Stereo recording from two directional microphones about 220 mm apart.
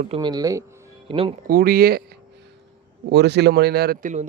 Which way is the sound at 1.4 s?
40° right (ahead or behind).